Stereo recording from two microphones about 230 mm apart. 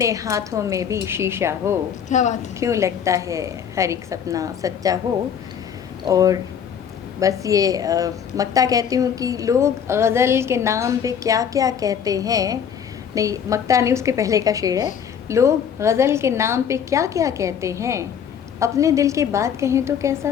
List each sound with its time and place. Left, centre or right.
0.0 s a woman's voice: centre
2.0 s speech: left
2.6 s a woman's voice: centre
6.1 s a woman's voice: centre